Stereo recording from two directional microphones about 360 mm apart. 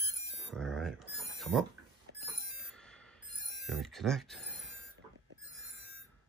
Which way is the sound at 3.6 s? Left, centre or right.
Centre.